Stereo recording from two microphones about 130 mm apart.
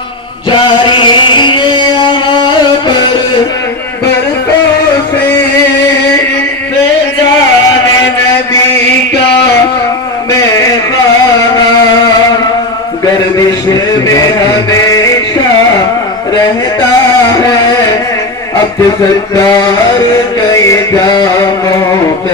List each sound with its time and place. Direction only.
0.5 s a sound: 40° left (ahead or behind)
14.0 s music: 25° left (ahead or behind)
17.3 s carnatic music: 25° left (ahead or behind)
20.5 s music: 25° left (ahead or behind)